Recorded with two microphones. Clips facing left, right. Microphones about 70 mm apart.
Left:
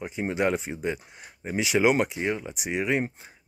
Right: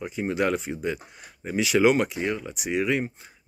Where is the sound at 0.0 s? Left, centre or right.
Centre.